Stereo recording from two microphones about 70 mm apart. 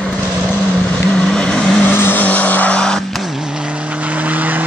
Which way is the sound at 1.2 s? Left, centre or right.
Centre.